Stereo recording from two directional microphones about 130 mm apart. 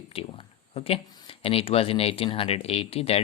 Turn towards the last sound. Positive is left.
turn(degrees=50)  # may be behind; listen again after turning